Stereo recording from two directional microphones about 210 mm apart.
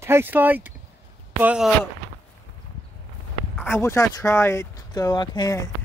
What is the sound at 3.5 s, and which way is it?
Speech, 5° left (ahead or behind).